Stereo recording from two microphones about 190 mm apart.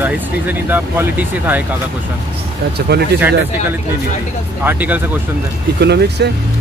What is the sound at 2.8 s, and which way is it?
Speech, 60° right (ahead or behind).